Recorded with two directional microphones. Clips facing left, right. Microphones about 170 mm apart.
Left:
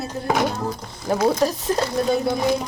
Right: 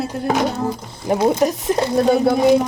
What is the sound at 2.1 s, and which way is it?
Speech, 65° right (ahead or behind).